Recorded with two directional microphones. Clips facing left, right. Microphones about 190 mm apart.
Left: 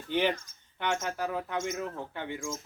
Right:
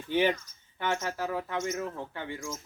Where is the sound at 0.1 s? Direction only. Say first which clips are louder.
Right 2 dB; 10° right (ahead or behind).